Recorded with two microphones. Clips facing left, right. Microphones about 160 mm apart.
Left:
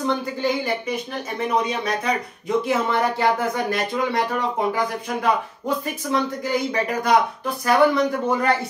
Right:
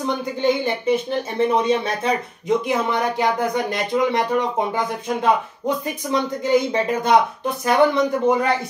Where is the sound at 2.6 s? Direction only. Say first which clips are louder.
Even; 15° right (ahead or behind).